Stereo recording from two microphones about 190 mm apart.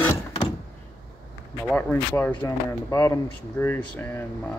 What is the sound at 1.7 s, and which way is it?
Speech, 10° left (ahead or behind).